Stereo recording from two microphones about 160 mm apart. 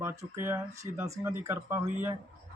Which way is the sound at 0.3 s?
15° right (ahead or behind).